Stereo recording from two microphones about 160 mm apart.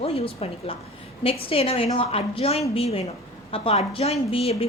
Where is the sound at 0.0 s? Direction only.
35° left (ahead or behind).